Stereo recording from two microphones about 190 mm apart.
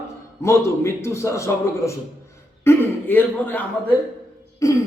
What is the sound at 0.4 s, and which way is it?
A man's voice, 15° left (ahead or behind).